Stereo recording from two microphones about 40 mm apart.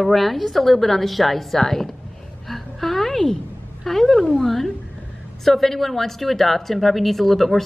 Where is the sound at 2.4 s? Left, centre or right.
Centre.